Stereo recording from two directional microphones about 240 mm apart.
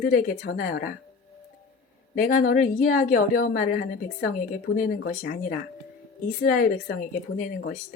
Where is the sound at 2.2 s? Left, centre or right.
Left.